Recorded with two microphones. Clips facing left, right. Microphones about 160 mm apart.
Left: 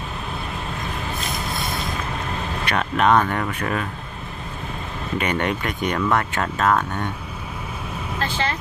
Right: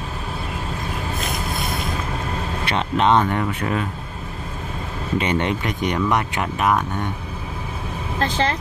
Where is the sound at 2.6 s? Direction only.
25° right (ahead or behind).